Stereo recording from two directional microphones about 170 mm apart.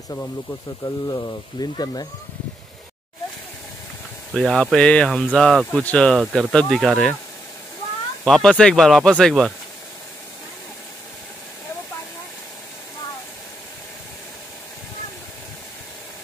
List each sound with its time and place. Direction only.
0.1 s speech: 20° left (ahead or behind)
4.4 s speech: centre (ahead or behind)
8.2 s speech: centre (ahead or behind)